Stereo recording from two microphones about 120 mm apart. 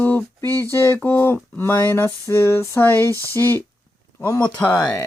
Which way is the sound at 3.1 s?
30° right (ahead or behind).